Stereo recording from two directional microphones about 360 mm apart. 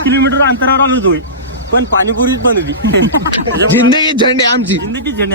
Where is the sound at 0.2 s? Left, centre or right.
Right.